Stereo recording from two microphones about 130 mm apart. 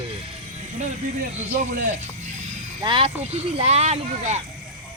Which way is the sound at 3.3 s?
55° right (ahead or behind).